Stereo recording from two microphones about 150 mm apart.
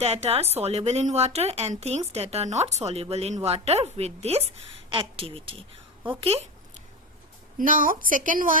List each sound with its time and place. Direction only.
0.0 s speech: 45° right (ahead or behind)
7.6 s a woman's voice: 65° right (ahead or behind)